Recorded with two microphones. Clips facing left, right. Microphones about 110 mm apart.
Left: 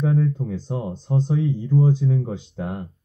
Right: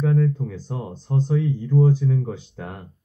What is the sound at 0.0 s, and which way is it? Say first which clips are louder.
Speech: even; 25° left (ahead or behind).